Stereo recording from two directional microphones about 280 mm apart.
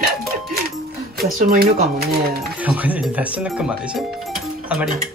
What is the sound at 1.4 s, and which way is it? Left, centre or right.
Speech, right.